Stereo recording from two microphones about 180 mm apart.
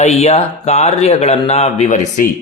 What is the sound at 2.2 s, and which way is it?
Speech, 50° left (ahead or behind).